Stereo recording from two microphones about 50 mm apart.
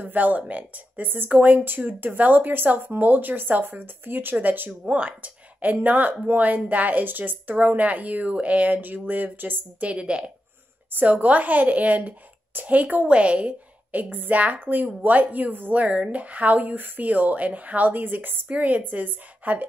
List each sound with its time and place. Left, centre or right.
0.0 s speech: right
4.8 s speech: right
9.8 s a woman's voice: right
10.9 s speech: right
18.5 s speech: right